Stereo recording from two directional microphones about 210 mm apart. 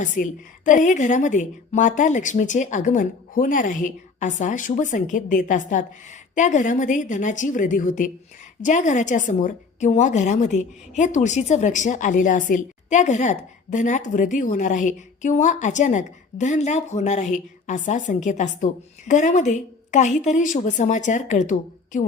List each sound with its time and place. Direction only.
0.0 s a woman's voice: 40° left (ahead or behind)